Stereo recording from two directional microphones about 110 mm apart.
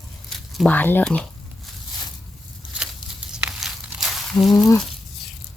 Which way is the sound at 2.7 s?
10° right (ahead or behind).